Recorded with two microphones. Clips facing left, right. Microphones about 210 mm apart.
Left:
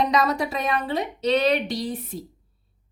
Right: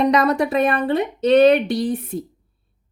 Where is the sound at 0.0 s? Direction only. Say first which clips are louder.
Right 5 dB; 60° right (ahead or behind).